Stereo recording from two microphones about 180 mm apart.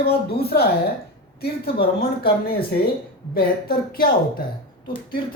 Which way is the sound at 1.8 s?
55° left (ahead or behind).